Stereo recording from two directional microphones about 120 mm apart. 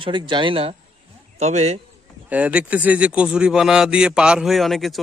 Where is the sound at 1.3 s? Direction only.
70° right (ahead or behind).